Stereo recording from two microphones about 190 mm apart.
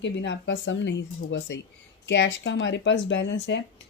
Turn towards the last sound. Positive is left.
turn(degrees=70)  # may be behind; listen again after turning